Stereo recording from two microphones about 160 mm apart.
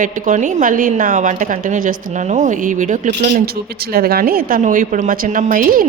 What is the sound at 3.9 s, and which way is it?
A woman's voice, 70° right (ahead or behind).